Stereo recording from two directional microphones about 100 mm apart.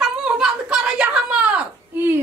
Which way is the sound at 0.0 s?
5° right (ahead or behind).